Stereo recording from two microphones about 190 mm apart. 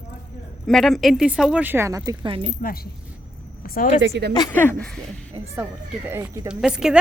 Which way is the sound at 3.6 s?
50° left (ahead or behind).